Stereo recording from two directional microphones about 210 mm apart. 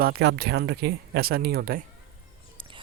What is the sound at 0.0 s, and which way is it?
Speech, 50° right (ahead or behind).